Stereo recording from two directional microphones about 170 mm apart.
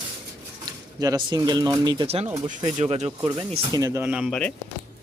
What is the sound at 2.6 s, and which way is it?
Speech, 40° right (ahead or behind).